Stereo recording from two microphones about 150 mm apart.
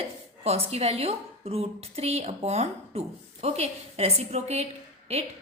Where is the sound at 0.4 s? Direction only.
40° right (ahead or behind).